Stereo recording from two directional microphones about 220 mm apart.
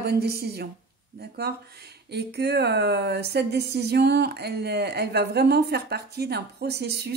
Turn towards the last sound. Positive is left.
turn(degrees=-50)  # may be behind; listen again after turning